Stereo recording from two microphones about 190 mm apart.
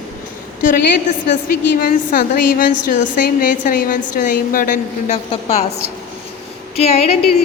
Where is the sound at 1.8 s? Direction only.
45° left (ahead or behind).